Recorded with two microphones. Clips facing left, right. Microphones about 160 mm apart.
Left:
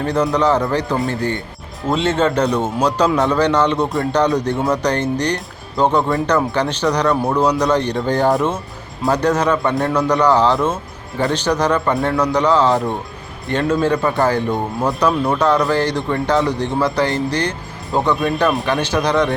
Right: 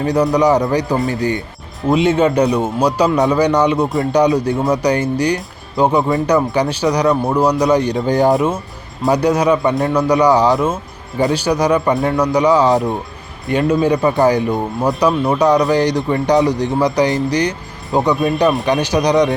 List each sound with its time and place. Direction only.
0.0 s speech: 10° right (ahead or behind)